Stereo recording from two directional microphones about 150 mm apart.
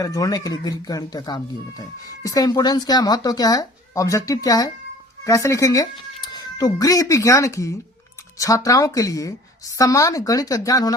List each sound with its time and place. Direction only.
0.0 s speech: 25° left (ahead or behind)